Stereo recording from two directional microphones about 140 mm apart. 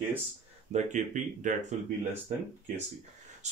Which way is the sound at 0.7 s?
60° right (ahead or behind).